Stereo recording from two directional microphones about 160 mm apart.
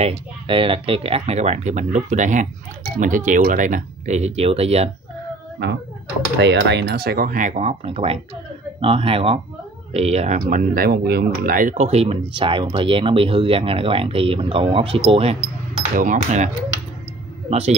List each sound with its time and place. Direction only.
0.0 s speech: 35° right (ahead or behind)
6.4 s speech: 90° right; by 10.4 s 45° right (ahead or behind)
10.5 s speech: 60° right (ahead or behind); by 15.3 s 35° right (ahead or behind)
16.0 s speech: 50° right (ahead or behind)
17.5 s speech: 40° right (ahead or behind)